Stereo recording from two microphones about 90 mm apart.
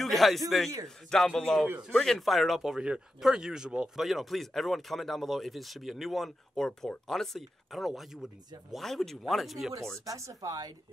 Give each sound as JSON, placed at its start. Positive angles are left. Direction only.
{"t": 0.0, "sound": "a man's voice", "side_deg": 0}
{"t": 9.9, "sound": "speech", "side_deg": -35}